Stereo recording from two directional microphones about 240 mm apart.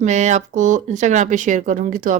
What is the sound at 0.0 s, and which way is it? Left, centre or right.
Speech, right.